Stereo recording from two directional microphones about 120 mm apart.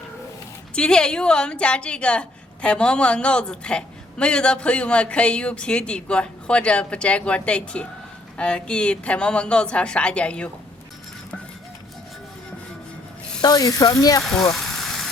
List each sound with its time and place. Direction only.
0.8 s a woman's voice: 5° left (ahead or behind)
13.4 s speech: 30° left (ahead or behind)
14.5 s vehicle: 5° left (ahead or behind)